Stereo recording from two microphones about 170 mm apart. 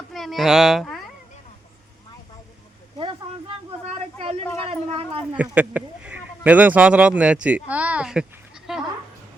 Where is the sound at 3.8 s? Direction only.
35° right (ahead or behind).